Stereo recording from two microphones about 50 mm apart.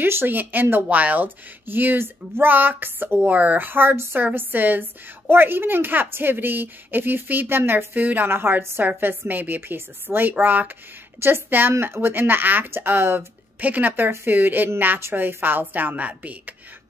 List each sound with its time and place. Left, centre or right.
0.0 s speech: right
4.2 s speech: right
11.1 s speech: right
13.6 s speech: right